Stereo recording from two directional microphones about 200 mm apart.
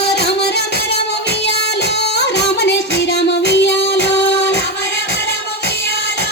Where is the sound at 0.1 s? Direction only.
60° left (ahead or behind).